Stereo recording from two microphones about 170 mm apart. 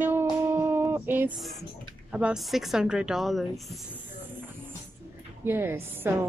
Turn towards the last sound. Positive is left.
turn(degrees=-15)  # may be behind; listen again after turning